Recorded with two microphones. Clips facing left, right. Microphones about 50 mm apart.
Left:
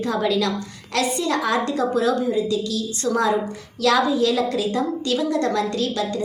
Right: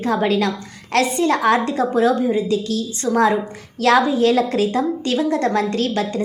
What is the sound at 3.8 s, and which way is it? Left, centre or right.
A woman's voice, right.